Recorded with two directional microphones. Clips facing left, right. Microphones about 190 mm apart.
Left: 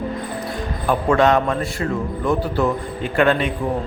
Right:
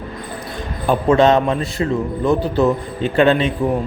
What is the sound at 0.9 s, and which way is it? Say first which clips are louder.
Speech: right 3 dB; 25° right (ahead or behind).